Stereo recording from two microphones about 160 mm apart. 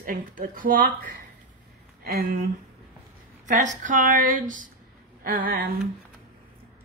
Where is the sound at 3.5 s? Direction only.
50° right (ahead or behind).